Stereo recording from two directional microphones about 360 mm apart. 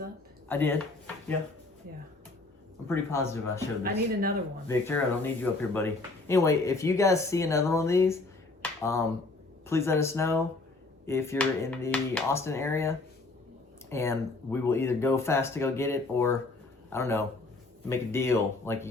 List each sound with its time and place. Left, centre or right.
0.4 s speech: centre
2.8 s speech: centre
4.7 s speech: centre
8.6 s finger snapping: centre
9.6 s speech: centre